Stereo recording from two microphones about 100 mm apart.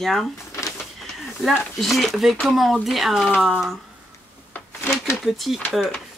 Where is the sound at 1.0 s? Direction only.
Centre (ahead or behind).